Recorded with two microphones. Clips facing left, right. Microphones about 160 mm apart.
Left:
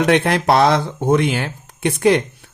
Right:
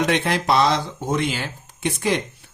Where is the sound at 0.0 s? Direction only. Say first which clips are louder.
Left 5 dB; 55° left (ahead or behind).